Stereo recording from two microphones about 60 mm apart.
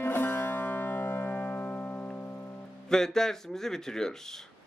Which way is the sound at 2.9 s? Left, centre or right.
Centre.